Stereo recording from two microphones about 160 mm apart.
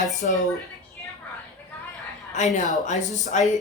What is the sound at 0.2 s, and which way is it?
Speech, 60° left (ahead or behind).